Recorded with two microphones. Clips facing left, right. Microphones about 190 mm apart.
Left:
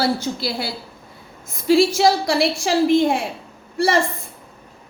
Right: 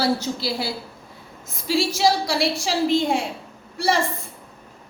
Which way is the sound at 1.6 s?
55° left (ahead or behind).